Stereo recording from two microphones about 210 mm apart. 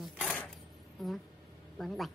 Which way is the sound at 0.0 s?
5° left (ahead or behind).